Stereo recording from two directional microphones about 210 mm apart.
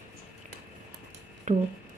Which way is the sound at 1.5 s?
35° right (ahead or behind).